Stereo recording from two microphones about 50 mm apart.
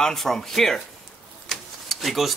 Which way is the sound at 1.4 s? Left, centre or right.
Centre.